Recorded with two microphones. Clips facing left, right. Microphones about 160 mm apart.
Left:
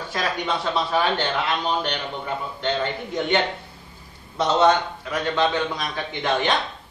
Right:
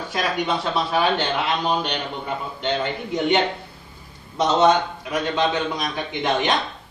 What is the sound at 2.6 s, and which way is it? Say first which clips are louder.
Speech: right 1 dB; 10° right (ahead or behind).